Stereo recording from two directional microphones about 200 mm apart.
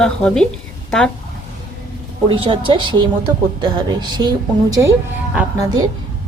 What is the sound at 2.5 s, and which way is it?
A woman's voice, 25° right (ahead or behind).